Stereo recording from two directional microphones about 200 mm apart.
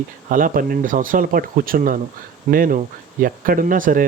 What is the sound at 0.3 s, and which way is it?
Speech, 45° right (ahead or behind).